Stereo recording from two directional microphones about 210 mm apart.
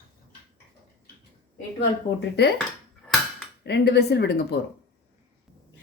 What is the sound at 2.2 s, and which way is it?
Speech, 50° left (ahead or behind).